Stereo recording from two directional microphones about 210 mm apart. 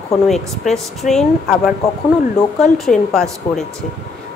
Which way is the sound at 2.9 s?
Centre (ahead or behind).